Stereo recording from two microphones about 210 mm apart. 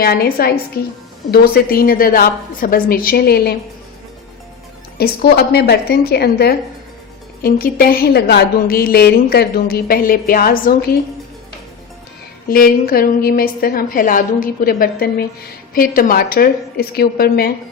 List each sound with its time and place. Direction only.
0.0 s a woman's voice: 45° left (ahead or behind)
4.9 s a woman's voice: 50° left (ahead or behind)
12.5 s a woman's voice: 45° left (ahead or behind)